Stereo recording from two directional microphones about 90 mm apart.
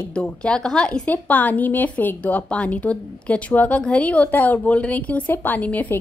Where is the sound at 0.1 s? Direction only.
10° left (ahead or behind).